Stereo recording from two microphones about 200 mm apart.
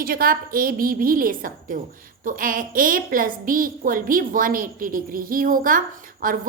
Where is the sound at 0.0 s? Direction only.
45° right (ahead or behind).